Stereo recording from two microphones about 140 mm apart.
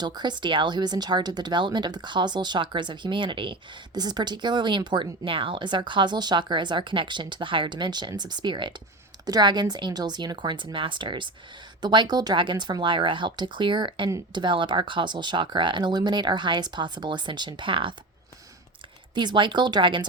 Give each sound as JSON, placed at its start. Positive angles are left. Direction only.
{"t": 0.0, "sound": "speech", "side_deg": -30}
{"t": 19.1, "sound": "speech", "side_deg": -35}